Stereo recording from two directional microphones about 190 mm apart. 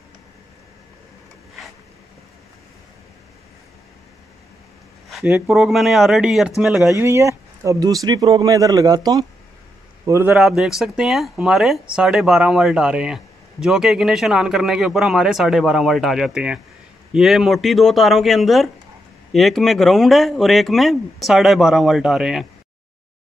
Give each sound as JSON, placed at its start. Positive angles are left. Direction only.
{"t": 5.1, "sound": "speech", "side_deg": -5}
{"t": 6.9, "sound": "a man's voice", "side_deg": -15}
{"t": 10.3, "sound": "speech", "side_deg": 0}